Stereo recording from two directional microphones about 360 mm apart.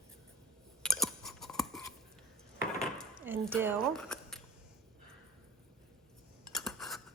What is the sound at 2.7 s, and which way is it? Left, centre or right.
Dishes, centre.